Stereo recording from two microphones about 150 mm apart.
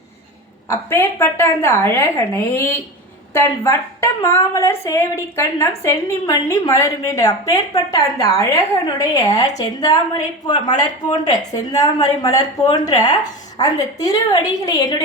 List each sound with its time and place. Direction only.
0.7 s a woman's voice: 15° left (ahead or behind)